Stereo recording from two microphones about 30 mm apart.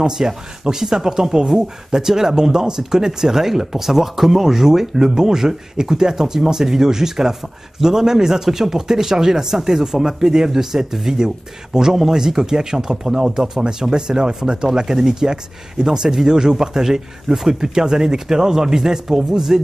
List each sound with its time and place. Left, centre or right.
0.0 s speech: centre